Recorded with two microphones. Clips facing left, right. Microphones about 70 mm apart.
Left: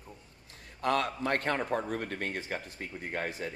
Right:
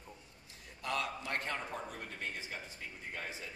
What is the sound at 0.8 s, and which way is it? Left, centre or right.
Speech, left.